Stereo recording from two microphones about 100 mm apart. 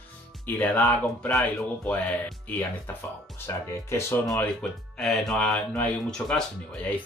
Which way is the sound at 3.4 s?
20° left (ahead or behind).